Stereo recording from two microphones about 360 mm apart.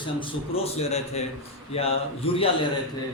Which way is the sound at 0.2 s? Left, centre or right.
Centre.